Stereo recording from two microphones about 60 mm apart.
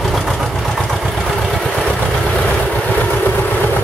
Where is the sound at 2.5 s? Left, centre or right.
Left.